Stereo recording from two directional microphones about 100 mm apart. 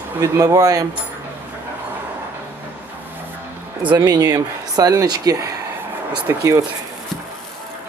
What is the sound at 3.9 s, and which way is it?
Speech, 45° right (ahead or behind).